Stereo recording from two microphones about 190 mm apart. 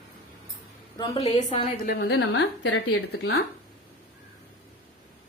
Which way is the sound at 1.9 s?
55° left (ahead or behind).